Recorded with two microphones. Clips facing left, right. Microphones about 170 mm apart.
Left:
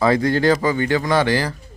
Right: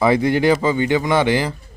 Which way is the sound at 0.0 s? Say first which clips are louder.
Right 1 dB; 15° right (ahead or behind).